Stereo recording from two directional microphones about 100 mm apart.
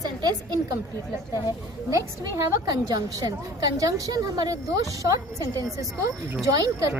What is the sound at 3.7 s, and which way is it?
A woman's voice, 35° right (ahead or behind).